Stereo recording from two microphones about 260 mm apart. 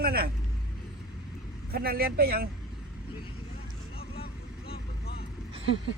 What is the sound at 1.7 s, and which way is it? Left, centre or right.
Speech, right.